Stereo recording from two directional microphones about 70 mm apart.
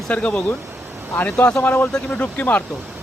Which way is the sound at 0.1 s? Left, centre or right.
Centre.